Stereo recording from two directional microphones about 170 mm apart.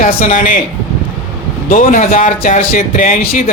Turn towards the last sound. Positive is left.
turn(degrees=50)  # may be behind; listen again after turning